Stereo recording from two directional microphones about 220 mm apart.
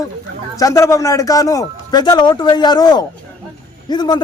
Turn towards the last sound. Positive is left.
turn(degrees=20)  # may be behind; listen again after turning